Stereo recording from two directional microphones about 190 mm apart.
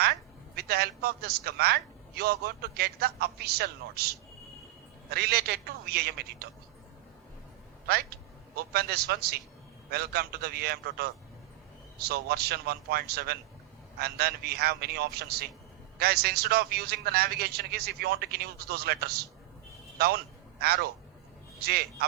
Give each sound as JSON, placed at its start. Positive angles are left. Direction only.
{"t": 0.5, "sound": "a man's voice", "side_deg": -55}
{"t": 7.9, "sound": "a man's voice", "side_deg": -55}